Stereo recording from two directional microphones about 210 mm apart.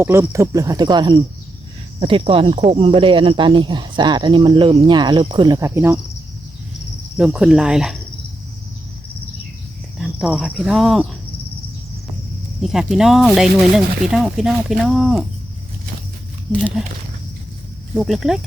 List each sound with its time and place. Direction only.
0.0 s speech: 10° right (ahead or behind)
7.2 s speech: 5° right (ahead or behind)
10.0 s speech: 5° right (ahead or behind)
12.6 s speech: centre (ahead or behind)
16.5 s speech: 5° left (ahead or behind)
17.9 s speech: centre (ahead or behind)